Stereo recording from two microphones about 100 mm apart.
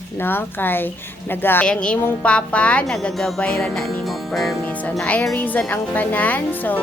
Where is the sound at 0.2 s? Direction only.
20° left (ahead or behind).